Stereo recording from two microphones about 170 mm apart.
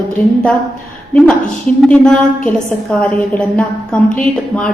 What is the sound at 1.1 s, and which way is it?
A woman's voice, 5° left (ahead or behind).